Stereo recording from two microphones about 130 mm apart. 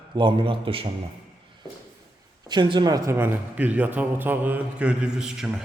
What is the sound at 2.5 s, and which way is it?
A man's voice, 35° right (ahead or behind).